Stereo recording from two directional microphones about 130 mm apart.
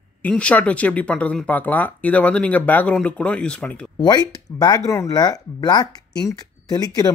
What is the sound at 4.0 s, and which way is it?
Speech, 30° left (ahead or behind).